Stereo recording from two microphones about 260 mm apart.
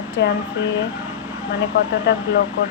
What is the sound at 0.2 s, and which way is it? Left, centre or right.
Speech, left.